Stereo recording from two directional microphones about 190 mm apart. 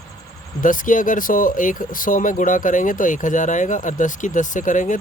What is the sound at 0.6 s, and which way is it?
Speech, 45° left (ahead or behind).